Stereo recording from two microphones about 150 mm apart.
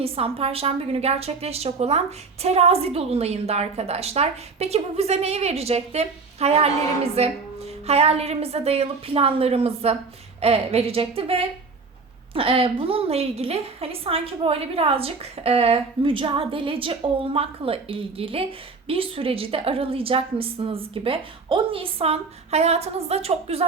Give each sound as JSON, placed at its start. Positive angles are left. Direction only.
{"t": 0.0, "sound": "a woman's voice", "side_deg": -40}